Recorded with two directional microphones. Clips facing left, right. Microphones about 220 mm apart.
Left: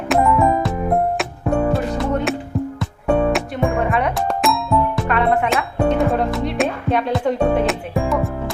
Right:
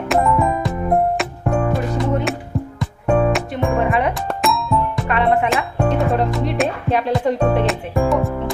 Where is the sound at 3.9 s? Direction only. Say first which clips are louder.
Even; centre (ahead or behind).